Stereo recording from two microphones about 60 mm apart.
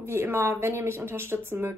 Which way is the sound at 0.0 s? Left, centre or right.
Right.